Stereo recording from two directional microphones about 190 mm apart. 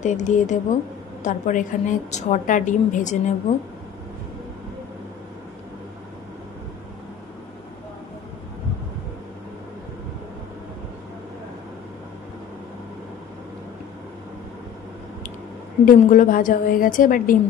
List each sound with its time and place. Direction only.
0.0 s a woman's voice: 40° left (ahead or behind)
15.8 s a woman's voice: 45° left (ahead or behind)